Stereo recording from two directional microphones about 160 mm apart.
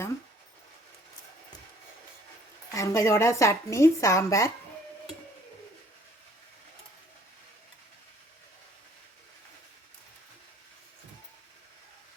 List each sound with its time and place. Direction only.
2.7 s speech: 20° left (ahead or behind)